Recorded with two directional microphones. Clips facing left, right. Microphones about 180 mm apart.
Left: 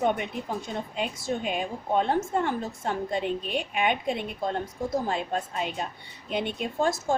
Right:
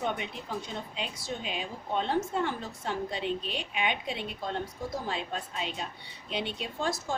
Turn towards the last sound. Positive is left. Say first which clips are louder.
# left 6 dB
turn(degrees=50)  # may be behind; listen again after turning